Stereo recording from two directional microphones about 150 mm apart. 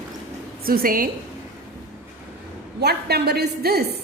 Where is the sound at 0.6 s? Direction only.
80° right.